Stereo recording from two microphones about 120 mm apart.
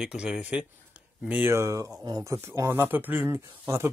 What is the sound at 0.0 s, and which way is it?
A man's voice, 5° right (ahead or behind).